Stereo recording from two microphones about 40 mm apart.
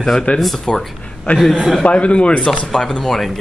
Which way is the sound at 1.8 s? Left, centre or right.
Left.